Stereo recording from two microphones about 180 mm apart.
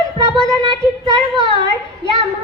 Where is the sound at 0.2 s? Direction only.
25° left (ahead or behind).